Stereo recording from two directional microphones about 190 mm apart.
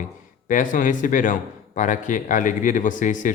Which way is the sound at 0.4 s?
45° left (ahead or behind).